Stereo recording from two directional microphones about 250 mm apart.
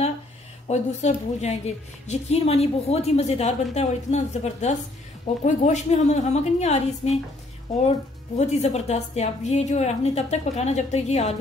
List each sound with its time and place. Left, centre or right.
0.7 s a woman's voice: left
8.4 s a woman's voice: left